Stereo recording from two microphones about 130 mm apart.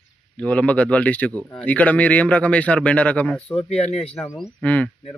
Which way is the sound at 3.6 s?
55° left (ahead or behind).